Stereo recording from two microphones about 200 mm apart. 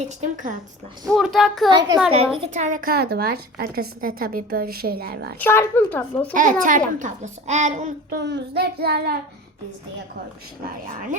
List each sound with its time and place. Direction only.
0.0 s a child's voice: 40° right (ahead or behind)
1.0 s a child's voice: centre (ahead or behind)
1.7 s a woman's voice: 20° right (ahead or behind)
2.4 s a woman's voice: 35° right (ahead or behind)
5.4 s a woman's voice: 10° left (ahead or behind)
6.3 s a child's voice: 40° right (ahead or behind)
8.1 s a woman's voice: 55° right (ahead or behind)
10.6 s a woman's voice: 45° right (ahead or behind)